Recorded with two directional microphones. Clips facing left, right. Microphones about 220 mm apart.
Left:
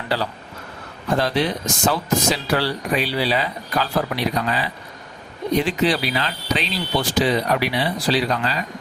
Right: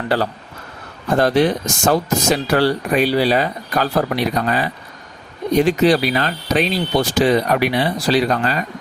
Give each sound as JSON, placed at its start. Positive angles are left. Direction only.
{"t": 0.1, "sound": "speech", "side_deg": -50}